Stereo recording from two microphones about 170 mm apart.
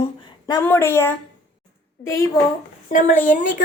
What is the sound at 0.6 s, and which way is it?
A woman's voice, 15° left (ahead or behind).